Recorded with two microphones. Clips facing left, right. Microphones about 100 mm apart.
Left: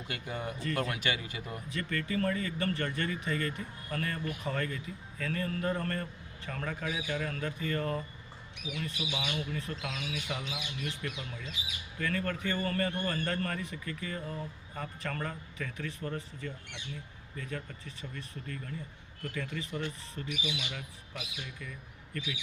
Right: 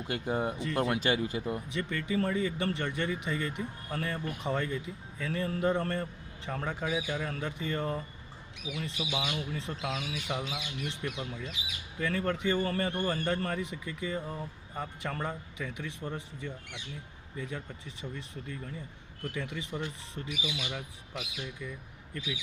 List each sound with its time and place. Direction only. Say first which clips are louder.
0.1 s speech: right 7 dB; 35° right (ahead or behind)
0.6 s a man's voice: right 3 dB; 20° right (ahead or behind)
0.9 s speech: right 6 dB; 35° right (ahead or behind)
1.5 s a man's voice: right 4 dB; 20° right (ahead or behind)